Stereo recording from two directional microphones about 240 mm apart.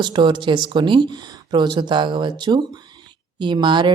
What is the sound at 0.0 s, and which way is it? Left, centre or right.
Speech, centre.